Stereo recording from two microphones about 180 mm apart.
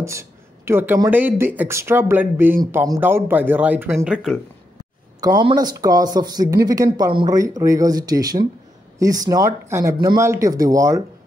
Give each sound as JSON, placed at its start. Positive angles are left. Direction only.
{"t": 0.0, "sound": "a sound", "side_deg": -15}
{"t": 1.1, "sound": "speech", "side_deg": -10}
{"t": 5.4, "sound": "speech", "side_deg": -25}